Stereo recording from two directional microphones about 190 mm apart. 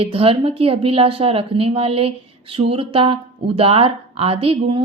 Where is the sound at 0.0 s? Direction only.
30° right (ahead or behind).